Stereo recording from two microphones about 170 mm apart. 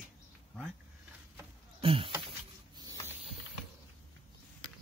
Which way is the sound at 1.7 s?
30° right (ahead or behind).